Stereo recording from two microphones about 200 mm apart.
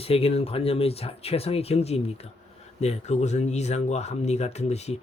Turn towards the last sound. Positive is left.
turn(degrees=35)  # may be behind; listen again after turning